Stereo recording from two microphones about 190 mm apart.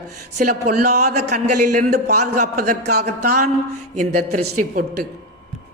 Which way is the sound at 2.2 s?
40° right (ahead or behind).